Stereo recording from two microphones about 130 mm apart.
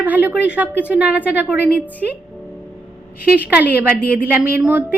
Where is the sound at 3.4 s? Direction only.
10° right (ahead or behind).